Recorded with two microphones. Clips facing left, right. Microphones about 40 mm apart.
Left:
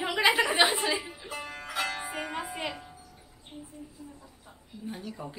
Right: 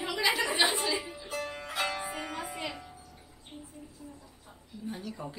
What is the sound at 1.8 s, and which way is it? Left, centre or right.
Music, left.